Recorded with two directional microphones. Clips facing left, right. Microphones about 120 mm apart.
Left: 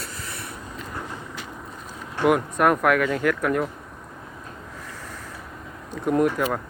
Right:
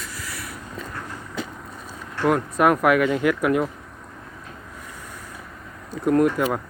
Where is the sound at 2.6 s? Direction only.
5° right (ahead or behind).